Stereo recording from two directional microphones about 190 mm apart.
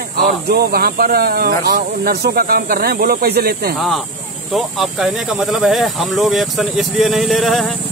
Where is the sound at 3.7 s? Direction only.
Centre (ahead or behind).